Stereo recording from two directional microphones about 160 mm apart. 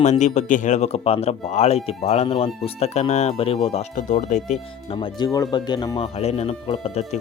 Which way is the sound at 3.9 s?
50° left (ahead or behind).